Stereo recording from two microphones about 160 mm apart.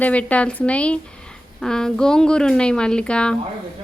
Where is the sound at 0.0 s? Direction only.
10° left (ahead or behind).